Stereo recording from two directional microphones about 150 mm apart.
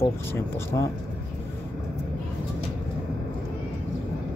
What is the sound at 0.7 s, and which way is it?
Speech, 25° left (ahead or behind).